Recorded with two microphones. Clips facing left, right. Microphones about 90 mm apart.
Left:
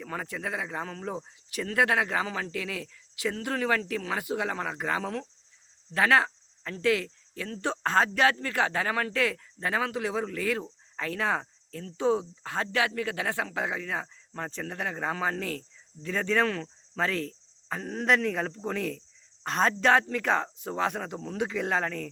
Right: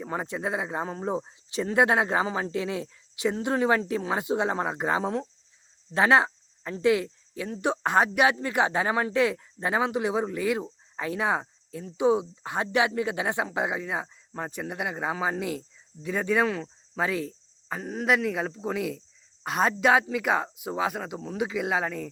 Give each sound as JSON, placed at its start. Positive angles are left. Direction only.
{"t": 0.0, "sound": "speech", "side_deg": -20}